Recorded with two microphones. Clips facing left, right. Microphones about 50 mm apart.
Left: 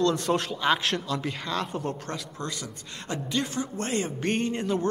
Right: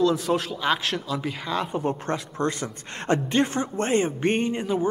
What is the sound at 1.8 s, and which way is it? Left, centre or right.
A man's voice, right.